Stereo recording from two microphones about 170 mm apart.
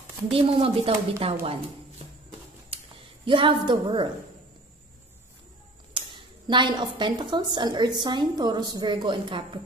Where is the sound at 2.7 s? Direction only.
35° right (ahead or behind).